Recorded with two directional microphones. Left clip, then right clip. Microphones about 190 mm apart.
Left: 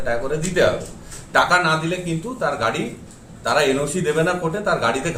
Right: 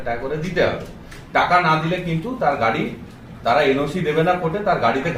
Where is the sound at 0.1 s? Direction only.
35° left (ahead or behind).